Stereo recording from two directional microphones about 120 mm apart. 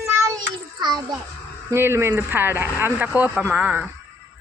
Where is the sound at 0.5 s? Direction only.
40° right (ahead or behind).